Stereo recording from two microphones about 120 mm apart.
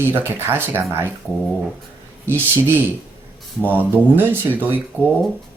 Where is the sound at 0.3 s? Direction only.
20° right (ahead or behind).